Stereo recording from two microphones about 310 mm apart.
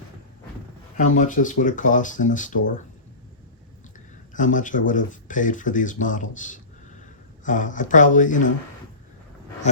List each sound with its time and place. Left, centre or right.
0.9 s speech: left
4.4 s speech: left